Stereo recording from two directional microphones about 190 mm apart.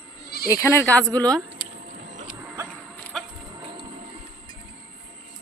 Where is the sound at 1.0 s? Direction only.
20° right (ahead or behind).